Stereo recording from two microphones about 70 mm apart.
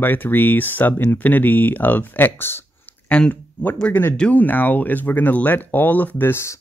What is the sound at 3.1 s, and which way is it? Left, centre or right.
Speech, centre.